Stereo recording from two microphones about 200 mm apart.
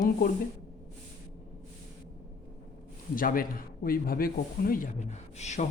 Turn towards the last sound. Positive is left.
turn(degrees=35)  # may be behind; listen again after turning